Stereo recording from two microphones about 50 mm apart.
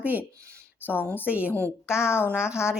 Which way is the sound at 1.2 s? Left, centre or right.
Right.